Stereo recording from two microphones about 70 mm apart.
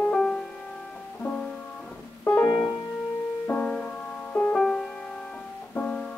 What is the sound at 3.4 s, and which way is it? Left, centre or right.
Music, centre.